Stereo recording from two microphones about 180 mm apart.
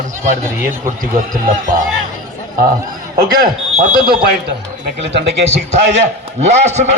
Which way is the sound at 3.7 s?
45° right (ahead or behind).